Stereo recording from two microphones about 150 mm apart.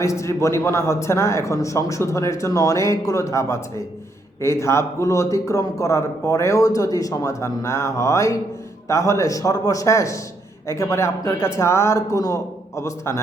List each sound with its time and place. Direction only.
0.0 s a man's voice: 20° left (ahead or behind)